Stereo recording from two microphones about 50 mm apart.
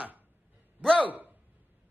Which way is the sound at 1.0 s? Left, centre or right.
Right.